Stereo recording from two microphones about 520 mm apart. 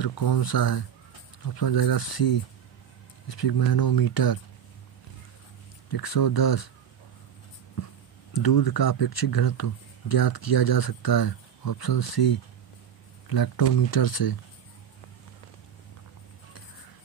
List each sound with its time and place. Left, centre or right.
0.0 s speech: left
5.9 s speech: left
8.3 s speech: left